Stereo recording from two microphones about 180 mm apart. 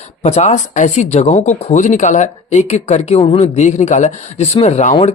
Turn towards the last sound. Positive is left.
turn(degrees=35)  # may be behind; listen again after turning